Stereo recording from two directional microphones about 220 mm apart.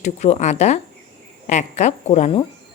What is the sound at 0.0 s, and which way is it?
A woman's voice, 30° left (ahead or behind).